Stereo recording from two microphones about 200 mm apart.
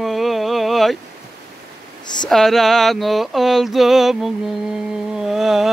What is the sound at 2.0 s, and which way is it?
Speech, 20° left (ahead or behind).